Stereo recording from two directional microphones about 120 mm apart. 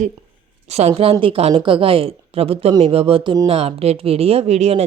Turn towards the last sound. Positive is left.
turn(degrees=-60)  # may be behind; listen again after turning